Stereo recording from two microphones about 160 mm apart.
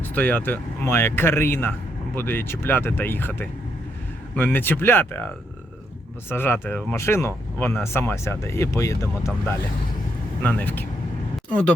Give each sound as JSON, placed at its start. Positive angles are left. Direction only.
{"t": 0.0, "sound": "speech", "side_deg": 10}